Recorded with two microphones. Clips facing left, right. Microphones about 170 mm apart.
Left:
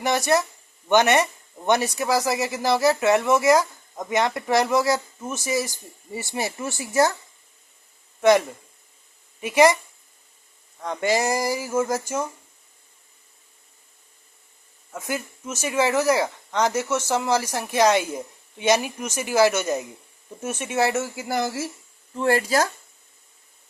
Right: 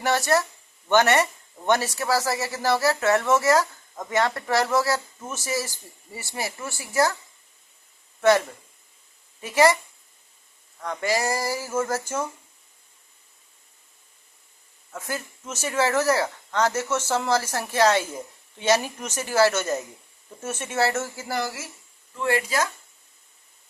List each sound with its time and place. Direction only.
0.0 s speech: 15° left (ahead or behind)
9.4 s speech: 15° left (ahead or behind)
10.8 s speech: 20° left (ahead or behind)
14.9 s speech: 15° left (ahead or behind)
22.1 s speech: 35° left (ahead or behind)